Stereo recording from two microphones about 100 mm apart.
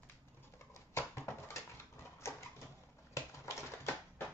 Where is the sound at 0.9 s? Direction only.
25° left (ahead or behind).